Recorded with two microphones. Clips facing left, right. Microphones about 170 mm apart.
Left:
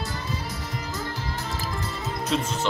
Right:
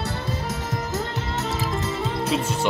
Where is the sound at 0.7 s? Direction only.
45° right (ahead or behind).